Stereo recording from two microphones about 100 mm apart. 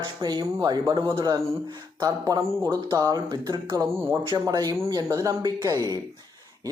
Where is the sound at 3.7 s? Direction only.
30° right (ahead or behind).